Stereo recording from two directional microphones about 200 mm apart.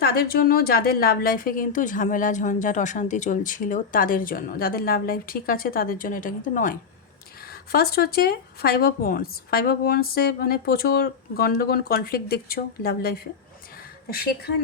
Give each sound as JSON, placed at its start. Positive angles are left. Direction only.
{"t": 0.0, "sound": "a woman's voice", "side_deg": 50}